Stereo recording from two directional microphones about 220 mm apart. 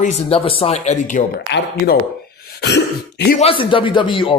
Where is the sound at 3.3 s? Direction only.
25° left (ahead or behind).